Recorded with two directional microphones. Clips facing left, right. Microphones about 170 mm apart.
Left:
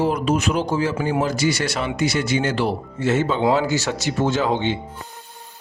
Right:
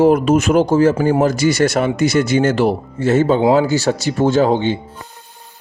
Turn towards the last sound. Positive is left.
turn(degrees=-35)  # may be behind; listen again after turning